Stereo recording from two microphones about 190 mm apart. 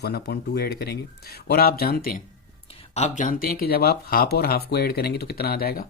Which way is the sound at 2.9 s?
40° left (ahead or behind).